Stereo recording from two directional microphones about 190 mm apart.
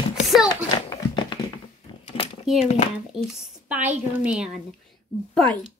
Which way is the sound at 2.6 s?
40° left (ahead or behind).